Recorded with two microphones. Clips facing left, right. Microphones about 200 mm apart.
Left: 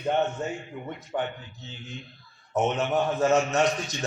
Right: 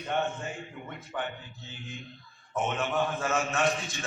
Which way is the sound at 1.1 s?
25° left (ahead or behind).